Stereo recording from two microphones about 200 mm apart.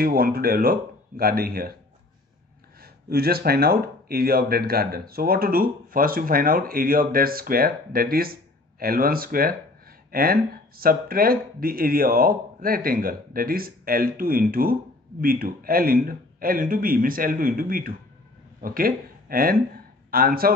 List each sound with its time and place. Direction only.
0.0 s speech: 50° right (ahead or behind)
2.8 s speech: 50° right (ahead or behind)